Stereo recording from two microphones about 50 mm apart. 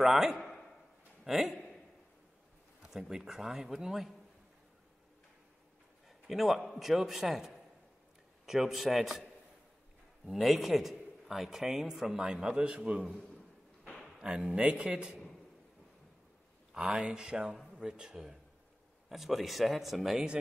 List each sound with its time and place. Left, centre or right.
0.0 s a man's voice: centre
0.4 s a sound: centre
1.2 s a sound: centre
2.8 s a man's voice: centre
6.0 s a man's voice: centre; by 13.0 s right
14.2 s speech: centre
16.7 s a man's voice: centre